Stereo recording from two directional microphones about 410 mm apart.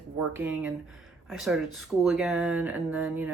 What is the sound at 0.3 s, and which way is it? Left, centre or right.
Speech, centre.